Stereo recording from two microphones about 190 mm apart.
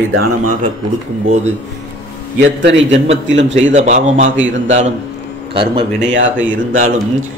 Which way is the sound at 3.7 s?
40° right (ahead or behind).